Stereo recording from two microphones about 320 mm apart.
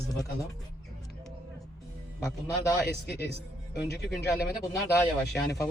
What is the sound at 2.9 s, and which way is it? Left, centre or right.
Speech, left.